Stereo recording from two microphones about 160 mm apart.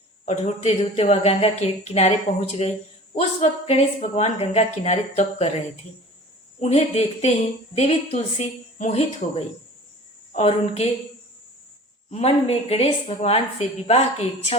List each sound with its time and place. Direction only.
0.3 s speech: 45° left (ahead or behind)
6.6 s a woman's voice: 40° left (ahead or behind)
12.1 s a woman's voice: 40° left (ahead or behind)